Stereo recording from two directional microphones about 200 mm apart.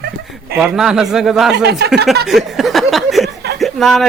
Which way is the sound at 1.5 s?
55° right (ahead or behind).